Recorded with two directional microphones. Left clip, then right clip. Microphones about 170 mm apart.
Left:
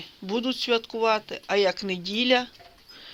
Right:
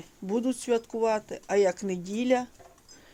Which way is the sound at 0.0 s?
15° right (ahead or behind).